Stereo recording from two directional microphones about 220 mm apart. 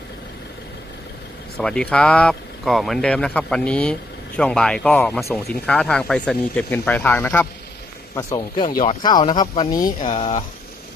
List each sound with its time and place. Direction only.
1.5 s speech: 5° left (ahead or behind); by 10.4 s 25° left (ahead or behind)